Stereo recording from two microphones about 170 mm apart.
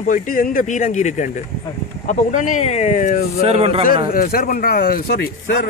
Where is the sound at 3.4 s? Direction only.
35° right (ahead or behind).